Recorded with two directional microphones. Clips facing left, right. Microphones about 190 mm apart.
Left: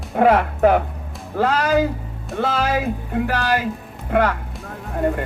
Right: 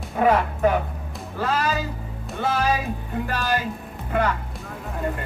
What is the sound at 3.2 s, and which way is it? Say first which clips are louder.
Speech: left 4 dB; 80° left.